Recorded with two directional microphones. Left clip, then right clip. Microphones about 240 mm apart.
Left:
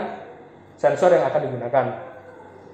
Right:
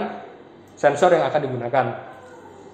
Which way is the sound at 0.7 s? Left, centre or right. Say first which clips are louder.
Right 1 dB; centre.